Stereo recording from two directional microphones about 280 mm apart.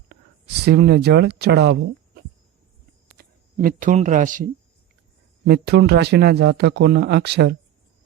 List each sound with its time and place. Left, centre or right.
0.1 s speech: right
3.2 s speech: right
5.5 s speech: right